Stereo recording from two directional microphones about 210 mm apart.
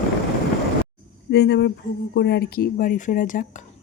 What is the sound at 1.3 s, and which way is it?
Speech, 50° left (ahead or behind).